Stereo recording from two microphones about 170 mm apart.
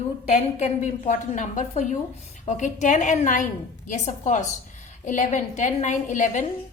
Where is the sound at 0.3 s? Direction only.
45° left (ahead or behind).